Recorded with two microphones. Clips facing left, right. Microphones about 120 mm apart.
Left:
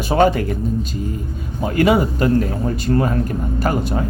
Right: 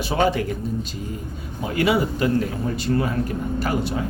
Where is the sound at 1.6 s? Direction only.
45° left (ahead or behind).